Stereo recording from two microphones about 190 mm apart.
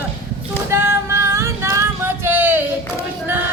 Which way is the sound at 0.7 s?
15° right (ahead or behind).